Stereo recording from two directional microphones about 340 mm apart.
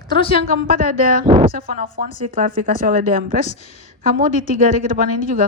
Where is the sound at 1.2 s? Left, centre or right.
Right.